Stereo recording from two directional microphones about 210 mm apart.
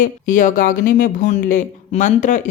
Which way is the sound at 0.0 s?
40° left (ahead or behind).